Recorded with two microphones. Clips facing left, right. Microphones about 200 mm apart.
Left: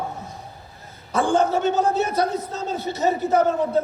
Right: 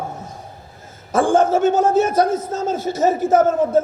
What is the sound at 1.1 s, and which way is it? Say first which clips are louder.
A man's voice: right 4 dB; 45° right (ahead or behind).